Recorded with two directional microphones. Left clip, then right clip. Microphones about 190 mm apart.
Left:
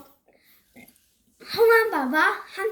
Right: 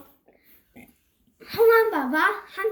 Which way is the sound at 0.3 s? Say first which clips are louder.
Even; 15° right (ahead or behind).